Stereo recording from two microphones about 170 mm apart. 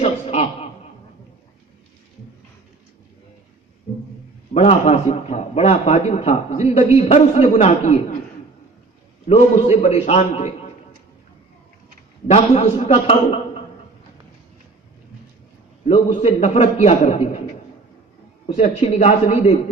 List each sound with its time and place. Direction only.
0.0 s chuckle: 35° left (ahead or behind)
4.5 s a man's voice: 40° left (ahead or behind)
9.2 s a man's voice: 40° left (ahead or behind)
12.3 s a man's voice: 35° left (ahead or behind)
15.9 s a man's voice: 40° left (ahead or behind)
18.5 s a man's voice: 40° left (ahead or behind)